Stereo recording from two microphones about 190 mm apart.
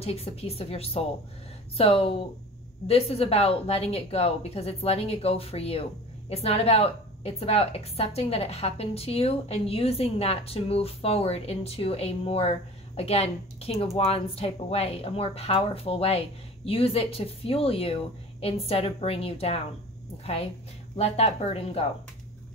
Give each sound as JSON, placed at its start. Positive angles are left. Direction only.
{"t": 0.0, "sound": "a woman's voice", "side_deg": 30}
{"t": 21.0, "sound": "a woman's voice", "side_deg": 35}